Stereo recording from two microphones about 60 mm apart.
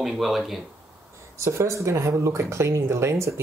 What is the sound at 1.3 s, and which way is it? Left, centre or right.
Speech, right.